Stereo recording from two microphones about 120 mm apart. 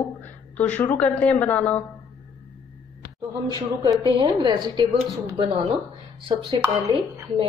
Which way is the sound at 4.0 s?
40° right (ahead or behind).